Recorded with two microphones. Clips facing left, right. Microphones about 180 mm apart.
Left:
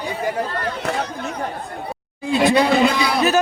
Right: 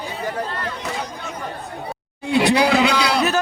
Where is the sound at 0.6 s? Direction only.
60° left (ahead or behind).